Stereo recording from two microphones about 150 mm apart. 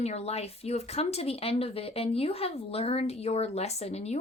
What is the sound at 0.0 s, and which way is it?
Speech, 45° left (ahead or behind).